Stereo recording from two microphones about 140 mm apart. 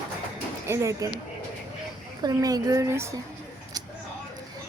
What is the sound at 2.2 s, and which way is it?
Speech, 25° right (ahead or behind).